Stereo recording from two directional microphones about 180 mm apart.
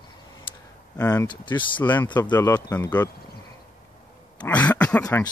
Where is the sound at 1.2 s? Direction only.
25° left (ahead or behind).